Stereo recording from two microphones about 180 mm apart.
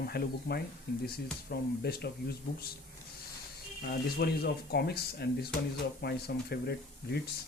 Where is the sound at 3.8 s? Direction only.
60° left (ahead or behind).